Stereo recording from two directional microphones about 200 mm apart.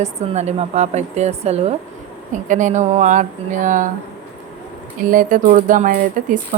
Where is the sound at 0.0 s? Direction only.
35° right (ahead or behind).